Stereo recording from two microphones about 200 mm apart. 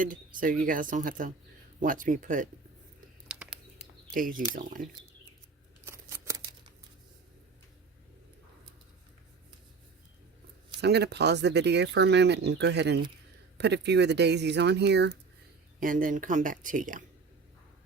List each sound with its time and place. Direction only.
0.6 s speech: 40° right (ahead or behind)
3.2 s a sound: 5° right (ahead or behind)
4.1 s speech: 45° right (ahead or behind)
5.8 s scissors: 15° right (ahead or behind)
10.8 s speech: 55° right (ahead or behind)
15.8 s speech: 40° right (ahead or behind)